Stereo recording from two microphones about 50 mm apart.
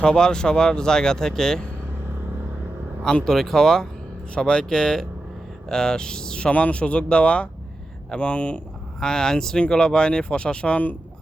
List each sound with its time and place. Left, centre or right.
0.0 s speech: centre
3.2 s speech: centre
6.5 s speech: left
9.0 s speech: centre